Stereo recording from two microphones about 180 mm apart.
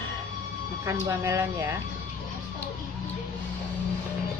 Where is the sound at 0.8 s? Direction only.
15° right (ahead or behind).